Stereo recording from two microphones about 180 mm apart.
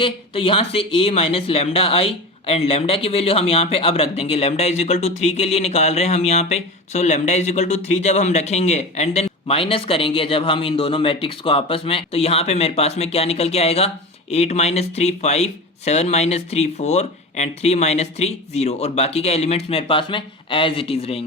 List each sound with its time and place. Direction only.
0.0 s a man's voice: 30° left (ahead or behind)